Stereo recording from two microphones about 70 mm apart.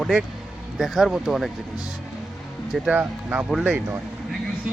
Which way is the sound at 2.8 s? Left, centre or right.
Right.